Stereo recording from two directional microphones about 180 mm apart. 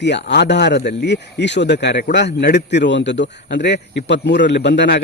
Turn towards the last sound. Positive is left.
turn(degrees=65)  # may be behind; listen again after turning